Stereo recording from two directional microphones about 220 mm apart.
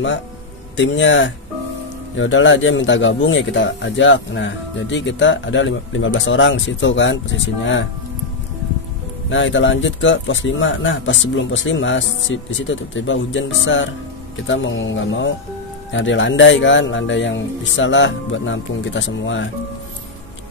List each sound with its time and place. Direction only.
0.7 s speech: 55° left (ahead or behind)
9.3 s speech: 60° left (ahead or behind)
14.5 s speech: 60° left (ahead or behind)